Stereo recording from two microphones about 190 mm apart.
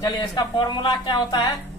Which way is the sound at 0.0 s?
25° left (ahead or behind).